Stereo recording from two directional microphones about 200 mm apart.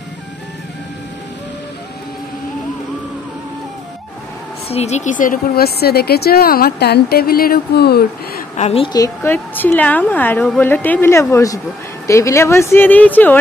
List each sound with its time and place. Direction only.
4.6 s speech: 35° left (ahead or behind); by 8.0 s 50° left (ahead or behind)
8.5 s a woman's voice: 35° left (ahead or behind)
8.9 s a woman's voice: 15° left (ahead or behind)